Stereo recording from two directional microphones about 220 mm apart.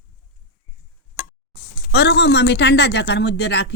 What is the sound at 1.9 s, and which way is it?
Speech, 50° left (ahead or behind).